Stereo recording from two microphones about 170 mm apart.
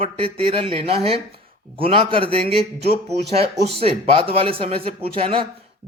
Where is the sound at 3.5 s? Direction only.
80° right.